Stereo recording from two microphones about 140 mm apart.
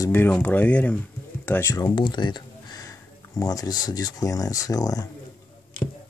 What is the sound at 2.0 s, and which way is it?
Speech, 35° left (ahead or behind).